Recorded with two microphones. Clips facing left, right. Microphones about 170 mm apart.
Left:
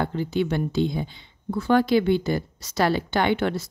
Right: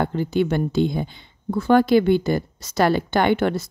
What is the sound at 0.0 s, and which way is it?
Speech, 50° right (ahead or behind).